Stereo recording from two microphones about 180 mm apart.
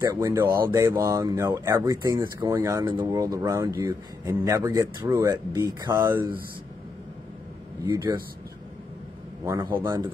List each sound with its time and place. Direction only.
0.0 s a man's voice: 15° right (ahead or behind)
7.8 s a man's voice: 25° right (ahead or behind)
9.4 s a man's voice: 20° right (ahead or behind)